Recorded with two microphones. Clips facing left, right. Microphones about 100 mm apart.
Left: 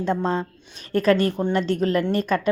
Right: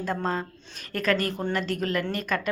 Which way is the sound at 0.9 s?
30° left (ahead or behind).